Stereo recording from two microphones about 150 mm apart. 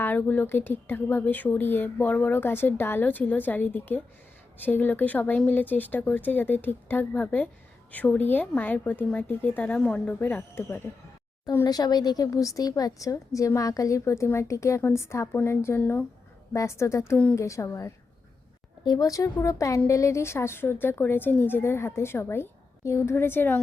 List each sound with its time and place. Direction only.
0.0 s speech: 15° left (ahead or behind)